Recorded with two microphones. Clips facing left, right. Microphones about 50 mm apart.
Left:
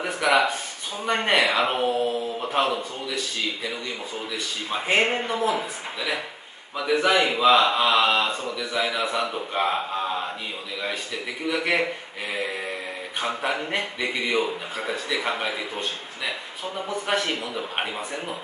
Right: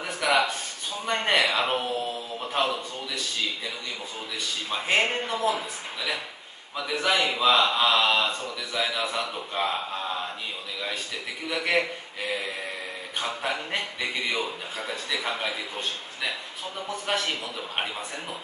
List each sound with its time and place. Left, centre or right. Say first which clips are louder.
0.0 s a sound: left 3 dB; centre
4.6 s a man's voice: left 3 dB; left
5.1 s speech: left 2 dB; centre
7.2 s a man's voice: left 4 dB; centre
11.5 s speech: left 1 dB; centre
13.2 s a man's voice: left 4 dB; centre
17.1 s speech: left 3 dB; centre